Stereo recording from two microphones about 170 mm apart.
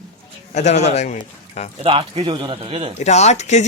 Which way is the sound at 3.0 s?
40° left (ahead or behind).